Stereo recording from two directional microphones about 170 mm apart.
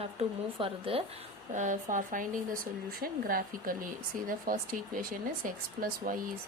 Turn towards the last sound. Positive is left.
turn(degrees=-55)  # may be behind; listen again after turning